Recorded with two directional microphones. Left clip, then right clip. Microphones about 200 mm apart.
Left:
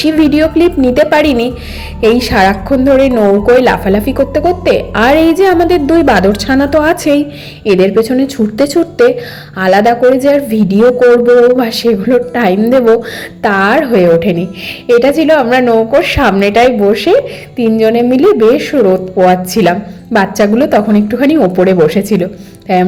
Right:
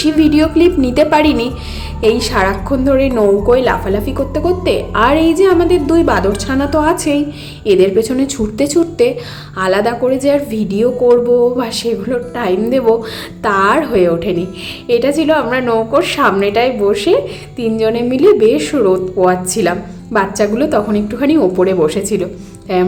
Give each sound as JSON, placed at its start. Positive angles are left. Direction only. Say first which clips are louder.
{"t": 0.0, "sound": "a woman's voice", "louder": "left 2 dB", "side_deg": 10}